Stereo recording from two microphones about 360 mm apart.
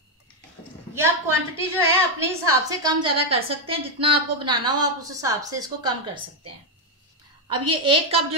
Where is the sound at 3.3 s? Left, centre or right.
Centre.